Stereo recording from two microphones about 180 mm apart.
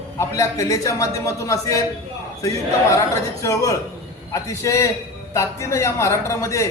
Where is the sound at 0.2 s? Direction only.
15° left (ahead or behind).